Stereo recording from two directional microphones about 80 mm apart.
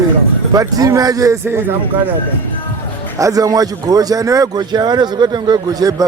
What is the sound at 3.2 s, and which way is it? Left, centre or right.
A man's voice, right.